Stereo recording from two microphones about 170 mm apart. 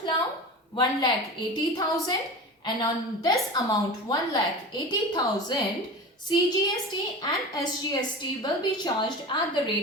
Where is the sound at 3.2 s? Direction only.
20° left (ahead or behind).